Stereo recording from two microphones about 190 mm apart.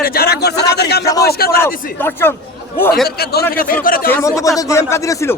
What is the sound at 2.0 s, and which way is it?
Speech, 10° left (ahead or behind).